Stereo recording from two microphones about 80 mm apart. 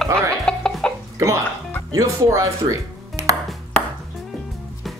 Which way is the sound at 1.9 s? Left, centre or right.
Right.